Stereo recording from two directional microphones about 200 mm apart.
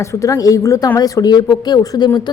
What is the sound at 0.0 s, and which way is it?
A woman's voice, 15° left (ahead or behind).